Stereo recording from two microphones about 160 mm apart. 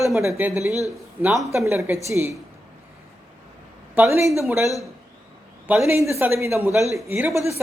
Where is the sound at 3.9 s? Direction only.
15° right (ahead or behind).